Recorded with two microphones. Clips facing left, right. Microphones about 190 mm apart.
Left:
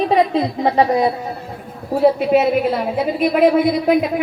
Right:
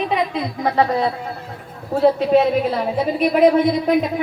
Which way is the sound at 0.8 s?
15° left (ahead or behind).